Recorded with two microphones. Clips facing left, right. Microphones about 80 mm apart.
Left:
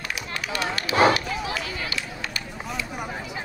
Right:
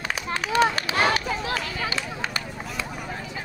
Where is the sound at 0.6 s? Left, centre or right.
Right.